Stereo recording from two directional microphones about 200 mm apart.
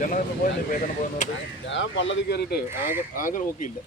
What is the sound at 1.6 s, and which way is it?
Speech, 65° left (ahead or behind).